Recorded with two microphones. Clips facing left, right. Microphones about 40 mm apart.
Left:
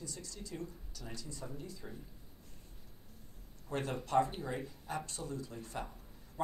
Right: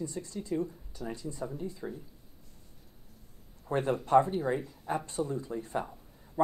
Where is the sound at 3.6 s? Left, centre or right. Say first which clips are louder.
Right 8 dB; right.